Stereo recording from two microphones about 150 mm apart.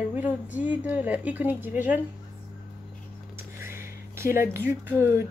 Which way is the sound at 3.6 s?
15° right (ahead or behind).